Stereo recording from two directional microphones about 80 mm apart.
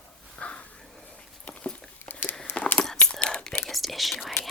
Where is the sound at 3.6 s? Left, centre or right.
Centre.